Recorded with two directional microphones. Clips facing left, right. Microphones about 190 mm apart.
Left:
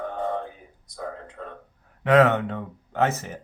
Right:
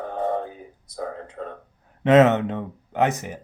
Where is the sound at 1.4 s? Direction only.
40° right (ahead or behind).